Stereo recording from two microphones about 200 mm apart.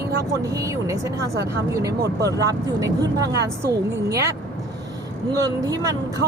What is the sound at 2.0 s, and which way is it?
Speech, 55° right (ahead or behind).